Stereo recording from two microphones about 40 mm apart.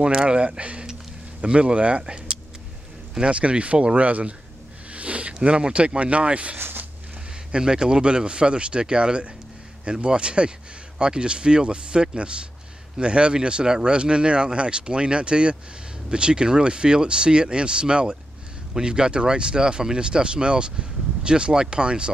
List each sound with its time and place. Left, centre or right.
0.0 s speech: right
7.5 s speech: centre